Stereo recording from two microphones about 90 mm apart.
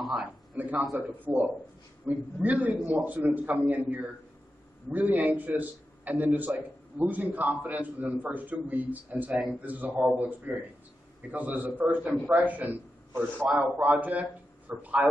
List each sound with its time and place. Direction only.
0.0 s a man's voice: 5° right (ahead or behind)
0.6 s a man's voice: 20° right (ahead or behind)